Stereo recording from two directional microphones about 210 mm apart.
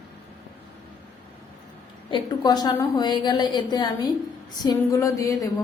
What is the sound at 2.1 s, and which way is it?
A woman's voice, 20° left (ahead or behind).